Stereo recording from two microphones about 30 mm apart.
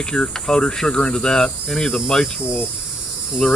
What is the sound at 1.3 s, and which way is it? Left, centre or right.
Cricket, centre.